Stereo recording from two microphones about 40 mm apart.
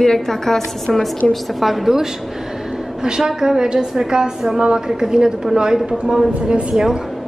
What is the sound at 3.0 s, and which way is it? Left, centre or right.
A woman's voice, centre.